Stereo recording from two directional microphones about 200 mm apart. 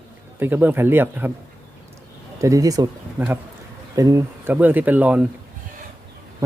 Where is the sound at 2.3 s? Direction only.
15° right (ahead or behind).